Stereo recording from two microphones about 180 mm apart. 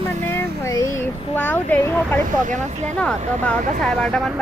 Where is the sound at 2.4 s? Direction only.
40° right (ahead or behind).